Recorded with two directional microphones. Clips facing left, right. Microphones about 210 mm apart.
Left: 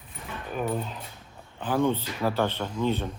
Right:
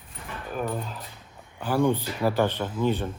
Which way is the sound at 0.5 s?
Centre (ahead or behind).